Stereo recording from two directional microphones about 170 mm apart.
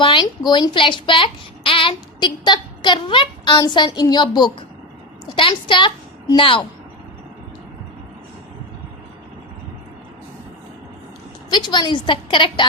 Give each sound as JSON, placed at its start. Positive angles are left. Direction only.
{"t": 0.0, "sound": "a woman's voice", "side_deg": 30}
{"t": 11.5, "sound": "speech", "side_deg": 25}